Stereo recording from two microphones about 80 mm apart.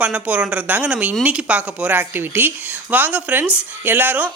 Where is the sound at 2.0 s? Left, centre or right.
Right.